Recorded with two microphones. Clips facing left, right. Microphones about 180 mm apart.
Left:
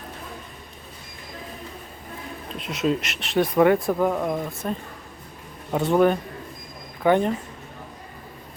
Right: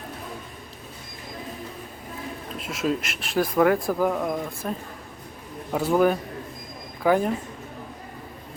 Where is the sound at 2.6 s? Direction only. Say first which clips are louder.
Left 2 dB; 5° right (ahead or behind).